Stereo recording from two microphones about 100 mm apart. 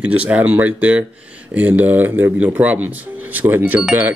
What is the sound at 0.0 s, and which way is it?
Speech, 15° right (ahead or behind).